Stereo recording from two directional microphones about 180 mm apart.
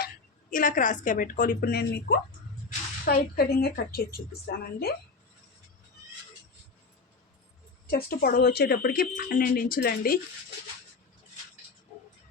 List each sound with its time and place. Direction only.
0.5 s a woman's voice: 45° left (ahead or behind)
7.9 s speech: 55° left (ahead or behind)